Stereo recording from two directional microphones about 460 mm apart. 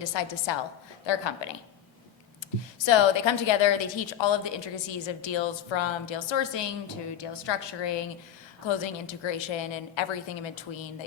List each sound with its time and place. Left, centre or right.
0.0 s a woman's voice: left
2.7 s a woman's voice: left